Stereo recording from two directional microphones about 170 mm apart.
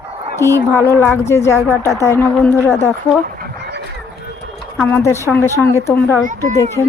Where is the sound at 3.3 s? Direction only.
65° right (ahead or behind).